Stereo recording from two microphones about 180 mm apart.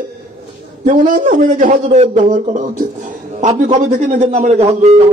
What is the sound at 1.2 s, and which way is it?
A man's voice, 50° right (ahead or behind).